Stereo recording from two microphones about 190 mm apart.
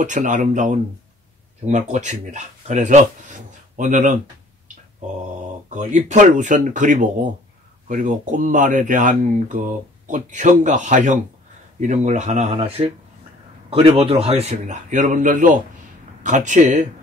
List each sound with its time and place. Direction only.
0.0 s speech: 40° right (ahead or behind)
5.7 s speech: 40° right (ahead or behind)